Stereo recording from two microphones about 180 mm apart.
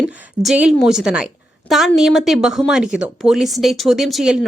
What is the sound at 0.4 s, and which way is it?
Speech, 5° right (ahead or behind).